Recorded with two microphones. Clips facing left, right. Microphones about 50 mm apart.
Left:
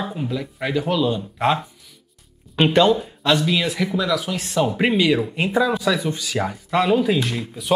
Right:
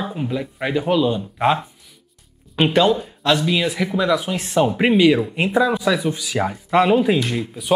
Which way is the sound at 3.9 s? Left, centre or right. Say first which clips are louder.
Right 3 dB; right.